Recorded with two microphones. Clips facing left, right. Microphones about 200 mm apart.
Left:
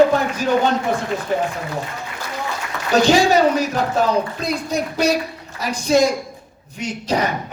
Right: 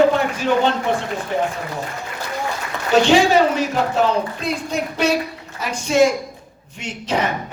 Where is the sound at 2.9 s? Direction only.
40° left (ahead or behind).